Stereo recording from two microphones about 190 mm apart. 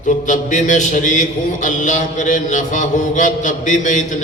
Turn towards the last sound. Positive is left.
turn(degrees=40)  # may be behind; listen again after turning